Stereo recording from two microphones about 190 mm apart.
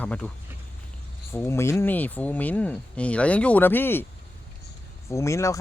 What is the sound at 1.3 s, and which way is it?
Speech, 15° left (ahead or behind).